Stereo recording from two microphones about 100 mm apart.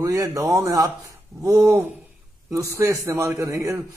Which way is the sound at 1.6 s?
20° right (ahead or behind).